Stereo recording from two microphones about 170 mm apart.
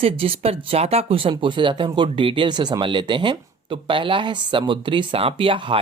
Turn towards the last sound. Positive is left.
turn(degrees=-30)  # may be behind; listen again after turning